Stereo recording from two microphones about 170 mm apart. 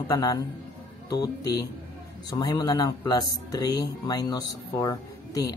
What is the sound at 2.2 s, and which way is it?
Speech, 20° left (ahead or behind).